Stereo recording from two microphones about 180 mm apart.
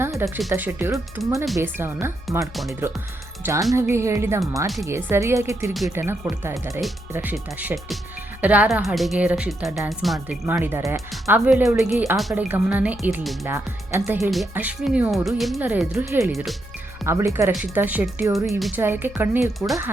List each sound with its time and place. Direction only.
0.0 s music: 15° right (ahead or behind)
0.5 s speech: 10° right (ahead or behind)
10.5 s speech: 15° right (ahead or behind)
13.4 s speech: 15° right (ahead or behind)
16.3 s speech: centre (ahead or behind)
17.0 s speech: 15° right (ahead or behind)
19.5 s speech: centre (ahead or behind)